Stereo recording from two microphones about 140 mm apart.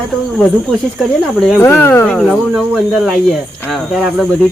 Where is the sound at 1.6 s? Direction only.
20° left (ahead or behind).